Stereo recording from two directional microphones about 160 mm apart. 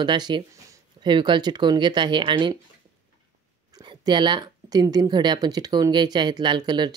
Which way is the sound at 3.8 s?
30° right (ahead or behind).